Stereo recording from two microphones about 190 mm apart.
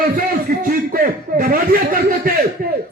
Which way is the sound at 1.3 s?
50° right (ahead or behind).